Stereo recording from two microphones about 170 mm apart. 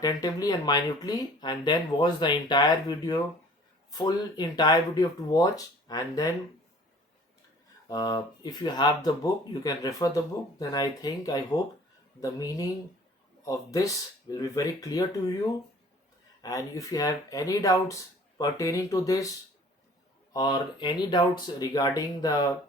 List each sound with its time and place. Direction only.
0.0 s speech: 20° left (ahead or behind)
7.9 s speech: 20° left (ahead or behind)
16.4 s speech: 20° left (ahead or behind)
20.3 s speech: 25° left (ahead or behind)